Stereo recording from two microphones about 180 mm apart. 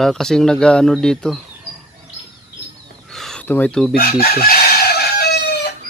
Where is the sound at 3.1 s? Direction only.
Centre (ahead or behind).